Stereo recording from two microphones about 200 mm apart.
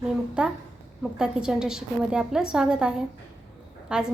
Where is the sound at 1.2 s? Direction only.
5° right (ahead or behind).